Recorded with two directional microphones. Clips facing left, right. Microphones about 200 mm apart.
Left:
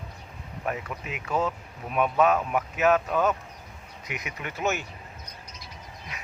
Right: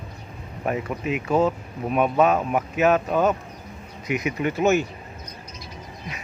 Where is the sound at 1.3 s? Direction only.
30° right (ahead or behind).